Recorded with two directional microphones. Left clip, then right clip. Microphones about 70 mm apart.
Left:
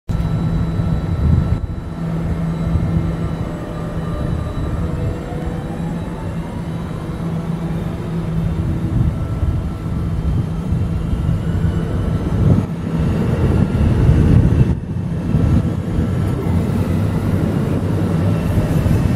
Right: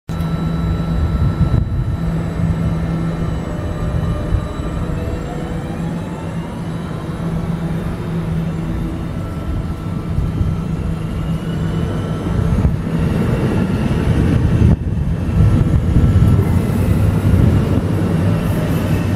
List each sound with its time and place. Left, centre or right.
12.4 s vehicle: right
16.9 s vehicle: right